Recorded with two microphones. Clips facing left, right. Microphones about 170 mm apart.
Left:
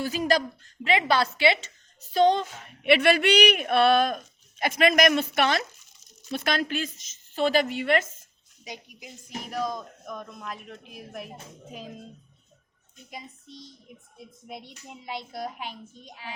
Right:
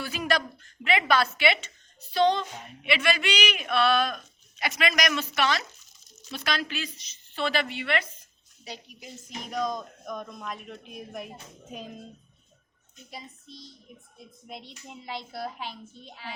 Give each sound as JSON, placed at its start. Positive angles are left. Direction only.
{"t": 0.0, "sound": "a woman's voice", "side_deg": 40}
{"t": 2.1, "sound": "speech", "side_deg": 45}
{"t": 2.8, "sound": "speech", "side_deg": 60}
{"t": 8.6, "sound": "speech", "side_deg": 15}
{"t": 13.1, "sound": "a child's voice", "side_deg": 15}